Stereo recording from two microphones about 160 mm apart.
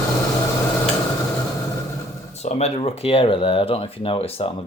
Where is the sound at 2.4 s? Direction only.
40° left (ahead or behind).